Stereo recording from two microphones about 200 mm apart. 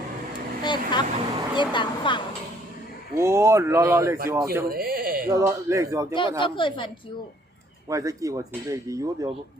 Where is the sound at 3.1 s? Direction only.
15° right (ahead or behind).